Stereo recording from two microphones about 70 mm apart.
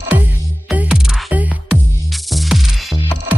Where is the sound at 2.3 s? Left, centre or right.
Centre.